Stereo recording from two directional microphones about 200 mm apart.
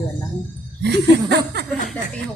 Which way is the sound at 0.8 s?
55° right (ahead or behind).